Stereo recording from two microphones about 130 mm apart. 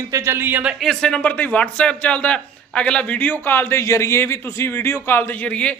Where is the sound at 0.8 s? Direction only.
5° left (ahead or behind).